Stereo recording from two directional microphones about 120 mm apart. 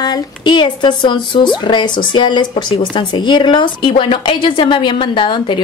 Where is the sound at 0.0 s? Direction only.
40° left (ahead or behind).